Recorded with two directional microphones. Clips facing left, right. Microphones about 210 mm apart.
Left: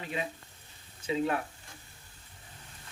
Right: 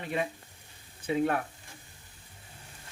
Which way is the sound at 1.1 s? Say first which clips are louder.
Right 2 dB; 55° right (ahead or behind).